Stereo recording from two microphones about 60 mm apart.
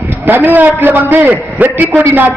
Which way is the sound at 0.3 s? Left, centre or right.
Right.